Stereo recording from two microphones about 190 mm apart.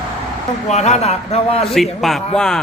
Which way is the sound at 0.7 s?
35° left (ahead or behind).